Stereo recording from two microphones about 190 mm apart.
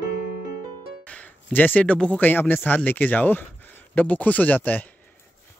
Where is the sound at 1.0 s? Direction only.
10° left (ahead or behind).